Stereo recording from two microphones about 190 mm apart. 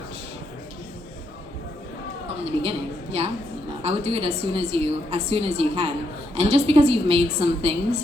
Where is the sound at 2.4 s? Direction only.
30° right (ahead or behind).